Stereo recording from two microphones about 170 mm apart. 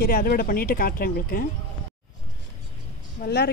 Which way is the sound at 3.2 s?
70° left (ahead or behind).